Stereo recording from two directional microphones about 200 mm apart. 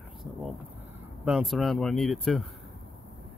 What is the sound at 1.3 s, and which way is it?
Speech, centre (ahead or behind).